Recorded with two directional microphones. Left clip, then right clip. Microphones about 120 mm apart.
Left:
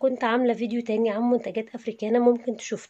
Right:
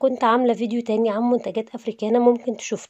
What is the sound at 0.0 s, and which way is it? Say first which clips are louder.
A woman's voice: right 5 dB; 45° right (ahead or behind).